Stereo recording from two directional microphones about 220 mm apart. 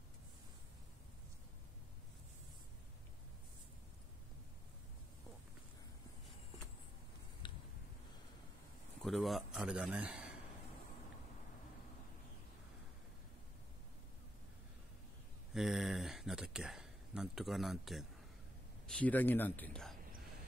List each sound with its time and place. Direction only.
7.4 s a sound: 20° left (ahead or behind)
9.0 s speech: centre (ahead or behind)
15.5 s speech: centre (ahead or behind)